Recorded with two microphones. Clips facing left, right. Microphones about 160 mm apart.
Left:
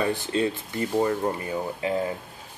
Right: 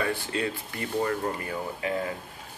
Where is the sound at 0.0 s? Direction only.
25° left (ahead or behind).